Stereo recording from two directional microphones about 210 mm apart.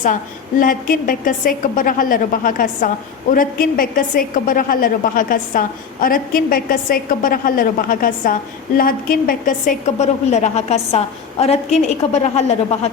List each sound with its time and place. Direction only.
0.6 s a woman's voice: 40° left (ahead or behind)